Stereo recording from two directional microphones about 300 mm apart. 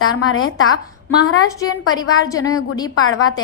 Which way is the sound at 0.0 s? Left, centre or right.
Left.